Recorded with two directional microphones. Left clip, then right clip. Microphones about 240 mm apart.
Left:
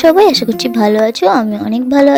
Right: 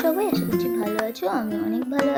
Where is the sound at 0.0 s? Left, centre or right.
Left.